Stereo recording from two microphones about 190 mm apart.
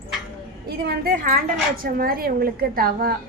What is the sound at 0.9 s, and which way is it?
A woman's voice, 50° right (ahead or behind).